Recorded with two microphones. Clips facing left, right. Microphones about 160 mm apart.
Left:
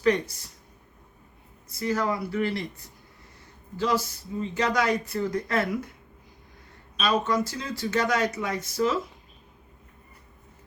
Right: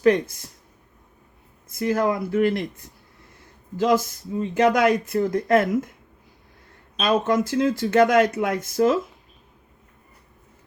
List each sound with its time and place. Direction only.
0.0 s speech: 55° right (ahead or behind)
1.7 s speech: 50° right (ahead or behind)
3.8 s speech: 50° right (ahead or behind)
7.0 s speech: 55° right (ahead or behind)